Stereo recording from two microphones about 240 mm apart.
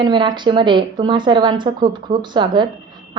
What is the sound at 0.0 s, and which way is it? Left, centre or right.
A woman's voice, centre.